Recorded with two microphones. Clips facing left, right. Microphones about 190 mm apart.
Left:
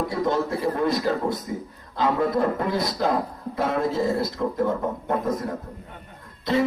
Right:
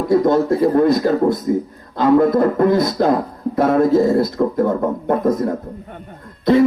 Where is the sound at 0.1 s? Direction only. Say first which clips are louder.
Right 10 dB; 40° right (ahead or behind).